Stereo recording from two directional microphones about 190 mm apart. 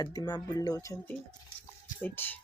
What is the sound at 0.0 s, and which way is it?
Speech, 20° left (ahead or behind).